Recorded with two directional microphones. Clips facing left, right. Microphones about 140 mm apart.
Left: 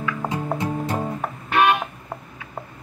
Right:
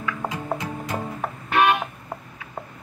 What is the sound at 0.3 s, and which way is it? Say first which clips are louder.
Music: left 4 dB; 30° left (ahead or behind).